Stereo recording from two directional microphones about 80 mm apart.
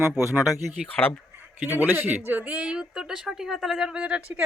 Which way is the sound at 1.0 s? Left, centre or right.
Centre.